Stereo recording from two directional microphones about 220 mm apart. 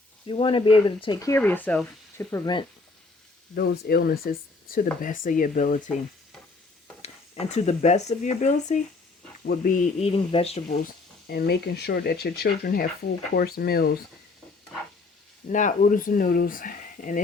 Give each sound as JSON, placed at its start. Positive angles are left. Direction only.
{"t": 0.3, "sound": "speech", "side_deg": 25}
{"t": 3.5, "sound": "speech", "side_deg": 45}
{"t": 7.0, "sound": "speech", "side_deg": 30}
{"t": 11.3, "sound": "speech", "side_deg": 45}
{"t": 15.4, "sound": "speech", "side_deg": 35}